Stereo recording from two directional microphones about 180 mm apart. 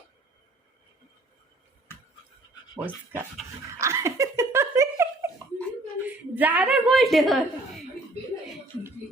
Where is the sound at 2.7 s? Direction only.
10° right (ahead or behind).